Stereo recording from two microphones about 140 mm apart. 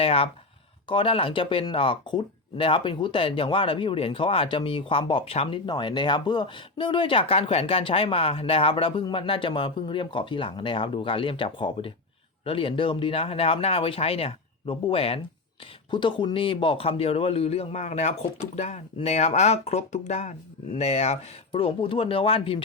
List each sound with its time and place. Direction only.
0.0 s speech: 40° left (ahead or behind)